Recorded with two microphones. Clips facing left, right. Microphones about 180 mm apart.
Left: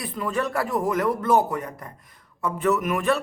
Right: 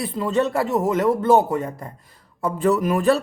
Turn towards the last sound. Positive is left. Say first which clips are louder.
# right 4 dB
turn(degrees=-35)  # may be behind; listen again after turning